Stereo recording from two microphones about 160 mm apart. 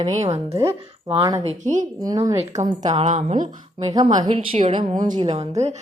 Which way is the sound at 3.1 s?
50° right (ahead or behind).